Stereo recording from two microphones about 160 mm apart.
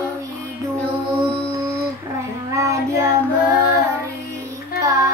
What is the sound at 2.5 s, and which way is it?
Child singing, 20° right (ahead or behind).